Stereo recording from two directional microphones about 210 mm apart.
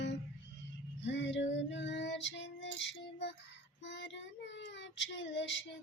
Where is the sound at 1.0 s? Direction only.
60° left (ahead or behind).